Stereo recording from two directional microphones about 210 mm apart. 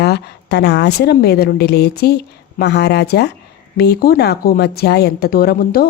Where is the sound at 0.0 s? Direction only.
50° left (ahead or behind).